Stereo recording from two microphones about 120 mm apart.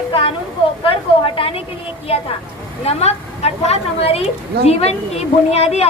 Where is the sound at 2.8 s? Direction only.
65° left (ahead or behind).